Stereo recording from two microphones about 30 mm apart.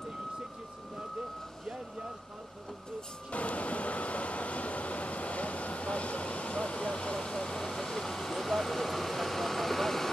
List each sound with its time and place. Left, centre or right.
3.3 s train: left
7.2 s vehicle: left